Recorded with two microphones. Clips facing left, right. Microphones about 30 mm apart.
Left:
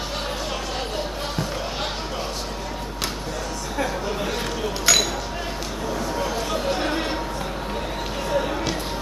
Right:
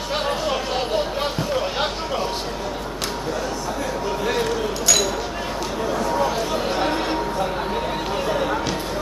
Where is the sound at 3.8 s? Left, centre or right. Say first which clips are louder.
Right 3 dB; centre.